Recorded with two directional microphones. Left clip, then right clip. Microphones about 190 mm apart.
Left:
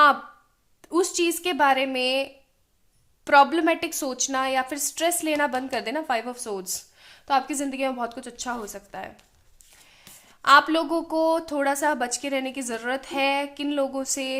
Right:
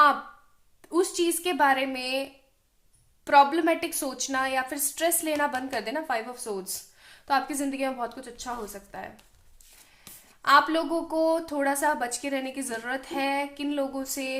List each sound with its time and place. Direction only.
0.8 s speech: 30° left (ahead or behind)
3.2 s a woman's voice: 30° left (ahead or behind)
10.4 s speech: 30° left (ahead or behind)